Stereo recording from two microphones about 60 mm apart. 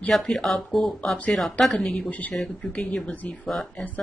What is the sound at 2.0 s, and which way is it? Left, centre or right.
Speech, left.